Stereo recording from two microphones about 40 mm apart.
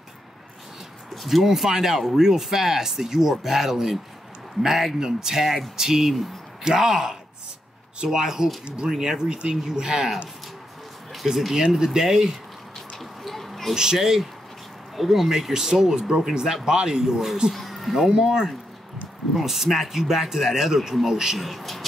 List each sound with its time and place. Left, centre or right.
1.1 s speech: centre
11.2 s speech: centre
12.9 s a sound: centre
13.9 s speech: centre
17.5 s a sound: centre
18.1 s speech: centre